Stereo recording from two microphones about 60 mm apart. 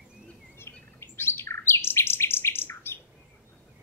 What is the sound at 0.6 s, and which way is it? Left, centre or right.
Bird, left.